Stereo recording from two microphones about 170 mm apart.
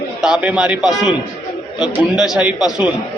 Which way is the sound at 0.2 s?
5° right (ahead or behind).